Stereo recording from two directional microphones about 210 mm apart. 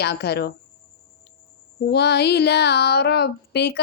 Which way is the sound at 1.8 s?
50° left (ahead or behind).